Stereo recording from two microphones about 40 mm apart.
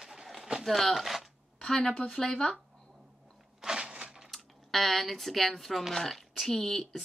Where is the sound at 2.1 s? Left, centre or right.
Centre.